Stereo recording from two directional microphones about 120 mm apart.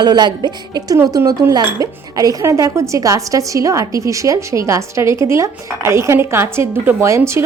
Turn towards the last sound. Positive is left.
turn(degrees=-25)  # may be behind; listen again after turning